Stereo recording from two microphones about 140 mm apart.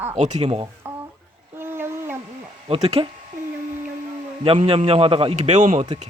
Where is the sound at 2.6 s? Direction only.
45° right (ahead or behind).